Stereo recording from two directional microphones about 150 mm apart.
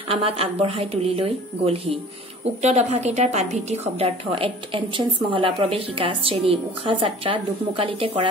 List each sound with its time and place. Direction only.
0.1 s a woman's voice: 40° right (ahead or behind)